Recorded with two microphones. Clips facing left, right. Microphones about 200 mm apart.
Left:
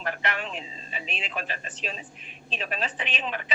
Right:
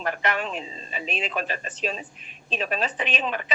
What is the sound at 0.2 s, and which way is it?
Speech, 45° right (ahead or behind).